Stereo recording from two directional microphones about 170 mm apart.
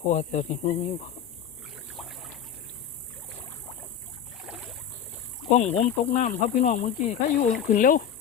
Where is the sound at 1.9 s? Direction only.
Centre (ahead or behind).